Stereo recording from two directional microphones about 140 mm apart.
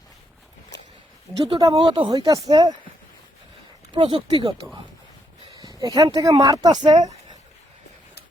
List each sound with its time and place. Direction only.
1.3 s speech: 35° right (ahead or behind)
3.9 s speech: 35° right (ahead or behind)